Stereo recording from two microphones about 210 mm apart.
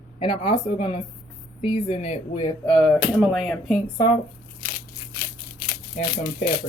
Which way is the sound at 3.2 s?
Centre (ahead or behind).